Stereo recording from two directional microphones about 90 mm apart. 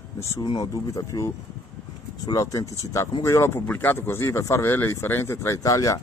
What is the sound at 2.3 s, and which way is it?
Speech, 35° left (ahead or behind).